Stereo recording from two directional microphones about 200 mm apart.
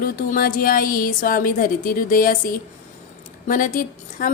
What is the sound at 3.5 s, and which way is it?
Speech, 45° left (ahead or behind).